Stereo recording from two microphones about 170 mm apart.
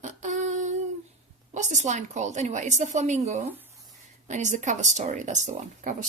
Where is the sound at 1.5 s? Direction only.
45° right (ahead or behind).